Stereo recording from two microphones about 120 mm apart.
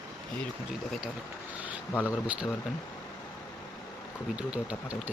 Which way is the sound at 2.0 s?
10° right (ahead or behind).